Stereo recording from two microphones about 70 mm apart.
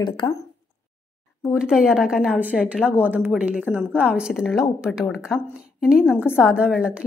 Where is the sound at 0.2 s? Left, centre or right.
Left.